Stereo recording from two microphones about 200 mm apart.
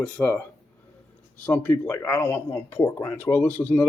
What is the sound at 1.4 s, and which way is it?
Speech, 10° left (ahead or behind).